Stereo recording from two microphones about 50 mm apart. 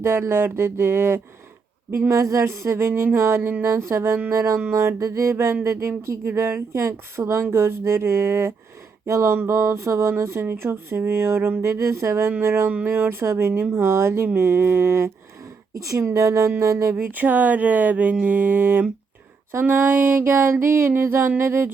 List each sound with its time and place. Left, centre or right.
0.0 s music: right
2.0 s music: right
4.3 s music: right
4.9 s music: right
9.0 s a sound: right
9.5 s music: right
10.1 s music: right
10.4 s music: right
11.6 s music: right
15.8 s a sound: right
16.6 s speech: right
17.0 s speech: right
19.6 s music: right